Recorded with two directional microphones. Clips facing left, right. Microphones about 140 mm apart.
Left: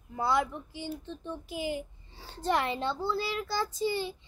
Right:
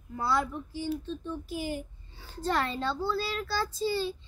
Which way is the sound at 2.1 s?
35° left (ahead or behind).